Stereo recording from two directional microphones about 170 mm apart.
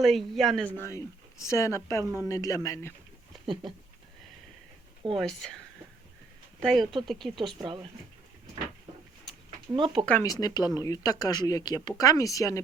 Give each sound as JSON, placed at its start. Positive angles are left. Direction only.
{"t": 0.0, "sound": "speech", "side_deg": 0}
{"t": 3.4, "sound": "speech", "side_deg": -30}
{"t": 5.1, "sound": "speech", "side_deg": 0}
{"t": 6.6, "sound": "speech", "side_deg": 5}
{"t": 7.6, "sound": "speech", "side_deg": -30}
{"t": 9.7, "sound": "speech", "side_deg": -30}
{"t": 10.2, "sound": "speech", "side_deg": 20}